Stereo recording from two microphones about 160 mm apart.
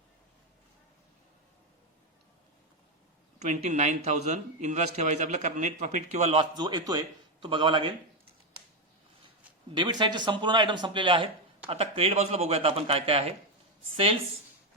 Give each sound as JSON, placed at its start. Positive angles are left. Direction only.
{"t": 3.3, "sound": "a man's voice", "side_deg": -45}
{"t": 9.7, "sound": "speech", "side_deg": -30}